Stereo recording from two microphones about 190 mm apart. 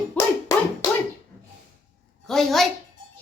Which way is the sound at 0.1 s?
15° left (ahead or behind).